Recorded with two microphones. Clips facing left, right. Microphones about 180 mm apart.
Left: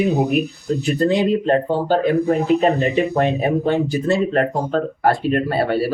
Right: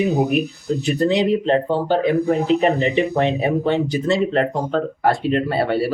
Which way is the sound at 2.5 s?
20° right (ahead or behind).